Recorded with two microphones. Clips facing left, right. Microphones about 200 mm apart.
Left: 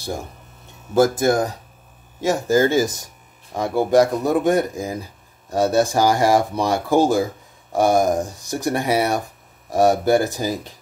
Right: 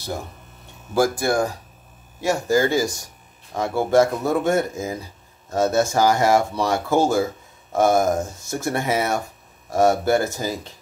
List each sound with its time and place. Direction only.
0.9 s speech: 20° left (ahead or behind)